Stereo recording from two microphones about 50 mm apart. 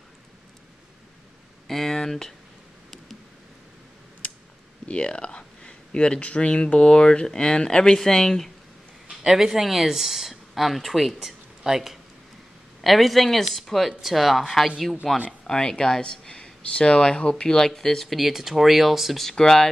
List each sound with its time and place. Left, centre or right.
1.7 s speech: centre
4.8 s speech: left
9.2 s speech: centre
15.4 s speech: centre
19.2 s speech: centre